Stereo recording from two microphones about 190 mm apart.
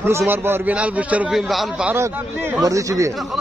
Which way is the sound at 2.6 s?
15° right (ahead or behind).